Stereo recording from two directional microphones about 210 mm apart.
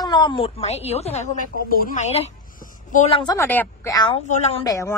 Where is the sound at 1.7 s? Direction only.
40° left (ahead or behind).